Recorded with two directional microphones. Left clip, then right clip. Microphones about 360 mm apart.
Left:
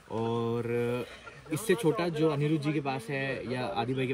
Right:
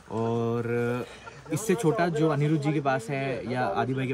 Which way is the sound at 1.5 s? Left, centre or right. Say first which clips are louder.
Right 2 dB; right.